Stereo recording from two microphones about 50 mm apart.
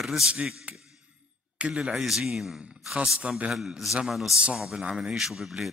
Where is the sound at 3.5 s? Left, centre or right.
Centre.